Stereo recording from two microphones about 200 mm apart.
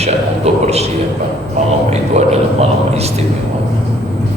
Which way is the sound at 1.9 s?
30° right (ahead or behind).